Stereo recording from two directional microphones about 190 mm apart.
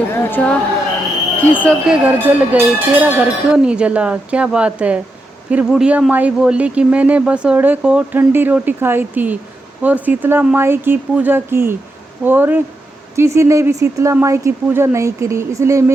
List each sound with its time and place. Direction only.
0.1 s speech: 10° left (ahead or behind)
1.9 s speech: 10° right (ahead or behind)